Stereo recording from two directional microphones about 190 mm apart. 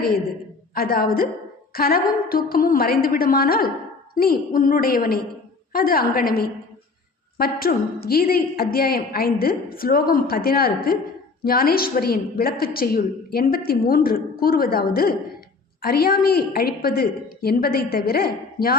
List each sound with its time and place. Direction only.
0.7 s a woman's voice: 50° left (ahead or behind)